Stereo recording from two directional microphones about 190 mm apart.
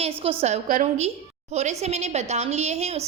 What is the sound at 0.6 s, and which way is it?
A woman's voice, 45° right (ahead or behind).